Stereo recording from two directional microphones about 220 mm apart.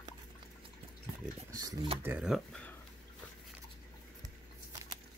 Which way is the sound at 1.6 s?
15° right (ahead or behind).